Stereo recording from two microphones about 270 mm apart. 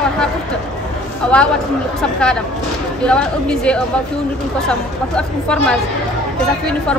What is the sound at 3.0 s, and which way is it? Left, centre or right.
A woman's voice, centre.